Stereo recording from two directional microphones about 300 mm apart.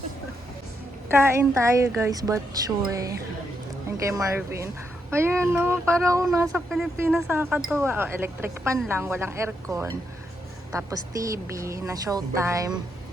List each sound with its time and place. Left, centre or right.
1.1 s speech: centre